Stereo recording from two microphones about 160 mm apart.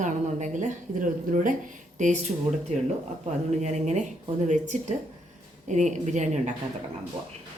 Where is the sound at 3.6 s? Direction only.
45° right (ahead or behind).